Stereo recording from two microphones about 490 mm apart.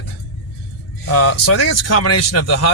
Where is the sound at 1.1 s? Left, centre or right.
Left.